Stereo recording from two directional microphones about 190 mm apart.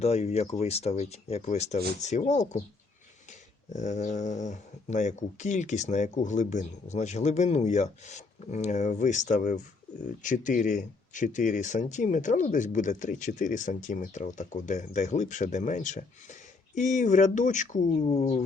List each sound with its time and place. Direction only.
0.0 s speech: 35° left (ahead or behind)